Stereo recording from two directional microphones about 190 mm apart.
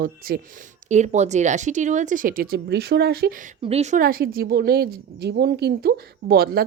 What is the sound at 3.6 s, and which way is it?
A woman's voice, 35° right (ahead or behind).